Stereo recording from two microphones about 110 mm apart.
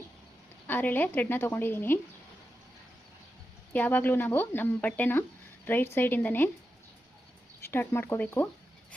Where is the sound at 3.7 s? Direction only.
15° left (ahead or behind).